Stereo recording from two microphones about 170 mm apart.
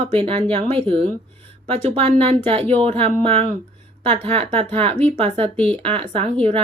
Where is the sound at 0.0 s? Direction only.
35° right (ahead or behind).